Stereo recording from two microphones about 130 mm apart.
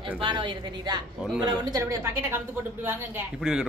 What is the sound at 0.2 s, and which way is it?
A woman's voice, 40° right (ahead or behind).